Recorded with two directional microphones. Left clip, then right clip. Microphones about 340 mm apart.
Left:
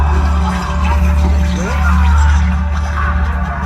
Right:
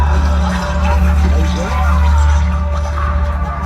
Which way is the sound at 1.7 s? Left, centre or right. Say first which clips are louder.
Left 2 dB; right.